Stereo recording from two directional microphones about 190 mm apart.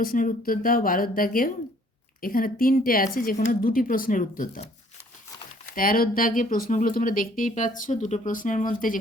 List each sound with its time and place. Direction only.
0.0 s speech: 45° left (ahead or behind)
5.7 s speech: 50° left (ahead or behind)